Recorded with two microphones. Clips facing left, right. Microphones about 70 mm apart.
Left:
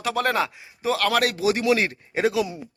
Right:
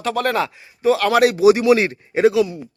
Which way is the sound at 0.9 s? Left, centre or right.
Centre.